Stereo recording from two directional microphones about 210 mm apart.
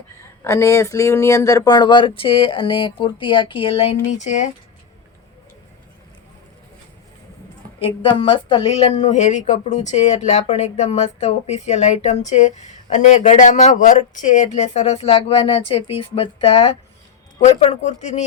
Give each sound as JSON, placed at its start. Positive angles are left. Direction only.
{"t": 0.4, "sound": "speech", "side_deg": 15}
{"t": 7.8, "sound": "speech", "side_deg": 25}